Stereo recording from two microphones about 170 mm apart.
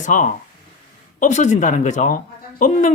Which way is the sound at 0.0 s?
50° left (ahead or behind).